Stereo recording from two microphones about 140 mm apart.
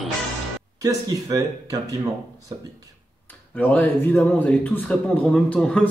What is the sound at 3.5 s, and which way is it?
A man's voice, 10° left (ahead or behind).